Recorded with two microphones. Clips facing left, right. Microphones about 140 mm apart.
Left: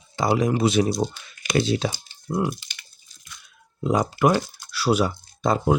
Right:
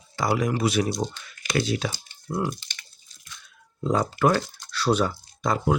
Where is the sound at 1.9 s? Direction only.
15° left (ahead or behind).